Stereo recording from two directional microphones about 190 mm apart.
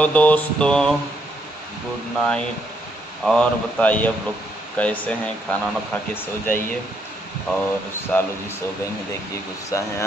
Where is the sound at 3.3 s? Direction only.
5° left (ahead or behind).